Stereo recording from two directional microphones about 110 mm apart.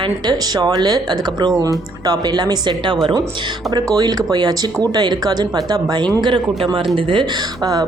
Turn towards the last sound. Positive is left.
turn(degrees=-35)  # may be behind; listen again after turning